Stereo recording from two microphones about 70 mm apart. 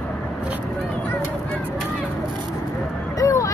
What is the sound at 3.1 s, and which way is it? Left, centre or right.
Speech, left.